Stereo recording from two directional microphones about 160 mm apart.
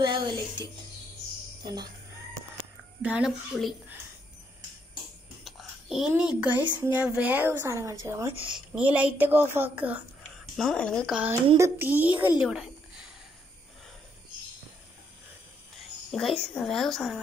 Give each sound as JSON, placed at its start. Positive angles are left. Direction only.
{"t": 0.0, "sound": "speech", "side_deg": -30}
{"t": 3.0, "sound": "a woman's voice", "side_deg": -5}
{"t": 5.4, "sound": "a sound", "side_deg": 0}
{"t": 6.9, "sound": "speech", "side_deg": -10}
{"t": 8.5, "sound": "speech", "side_deg": -5}
{"t": 10.4, "sound": "speech", "side_deg": 0}
{"t": 11.1, "sound": "speech", "side_deg": -15}
{"t": 16.1, "sound": "a woman's voice", "side_deg": 0}